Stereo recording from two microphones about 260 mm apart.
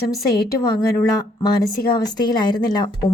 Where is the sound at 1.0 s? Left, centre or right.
Centre.